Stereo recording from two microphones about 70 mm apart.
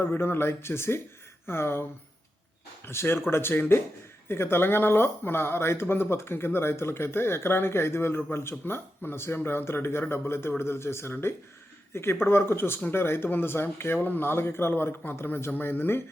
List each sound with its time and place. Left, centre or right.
0.0 s speech: left
2.8 s speech: left